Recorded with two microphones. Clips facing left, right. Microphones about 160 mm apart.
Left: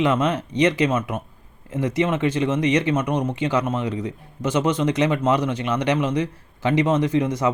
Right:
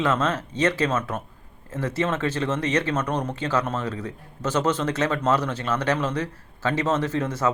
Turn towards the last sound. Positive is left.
turn(degrees=15)  # may be behind; listen again after turning